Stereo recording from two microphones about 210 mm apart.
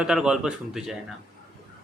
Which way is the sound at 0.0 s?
5° right (ahead or behind).